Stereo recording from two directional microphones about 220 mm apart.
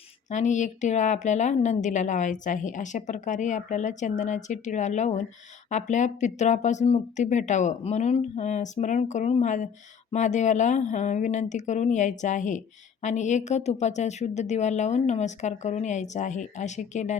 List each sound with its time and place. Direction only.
0.3 s speech: 35° left (ahead or behind)